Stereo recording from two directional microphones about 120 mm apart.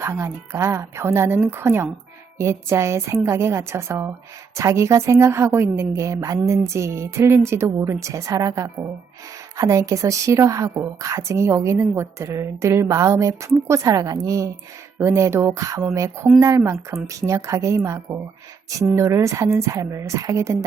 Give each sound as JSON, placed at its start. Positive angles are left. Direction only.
{"t": 0.0, "sound": "a woman's voice", "side_deg": -20}